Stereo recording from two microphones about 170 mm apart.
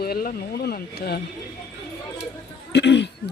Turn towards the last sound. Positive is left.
turn(degrees=90)